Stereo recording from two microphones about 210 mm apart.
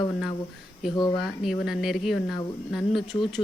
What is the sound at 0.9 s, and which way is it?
Speech, 20° left (ahead or behind).